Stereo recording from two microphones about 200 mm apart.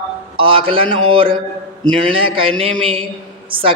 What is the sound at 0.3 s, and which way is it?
A man's voice, 25° right (ahead or behind).